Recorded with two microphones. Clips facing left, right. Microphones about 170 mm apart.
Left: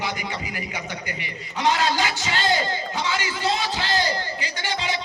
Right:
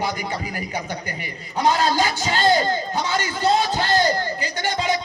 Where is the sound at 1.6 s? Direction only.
40° right (ahead or behind).